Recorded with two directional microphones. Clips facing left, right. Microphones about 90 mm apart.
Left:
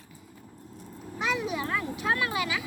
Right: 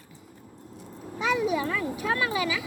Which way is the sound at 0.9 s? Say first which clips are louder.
Right 2 dB; 25° right (ahead or behind).